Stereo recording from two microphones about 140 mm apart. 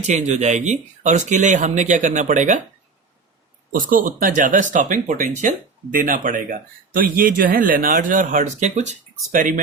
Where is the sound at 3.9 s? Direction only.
80° right.